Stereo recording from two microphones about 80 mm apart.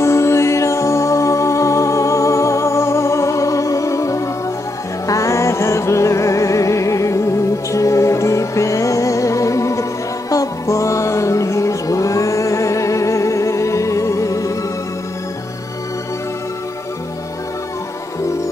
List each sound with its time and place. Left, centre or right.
0.0 s music: left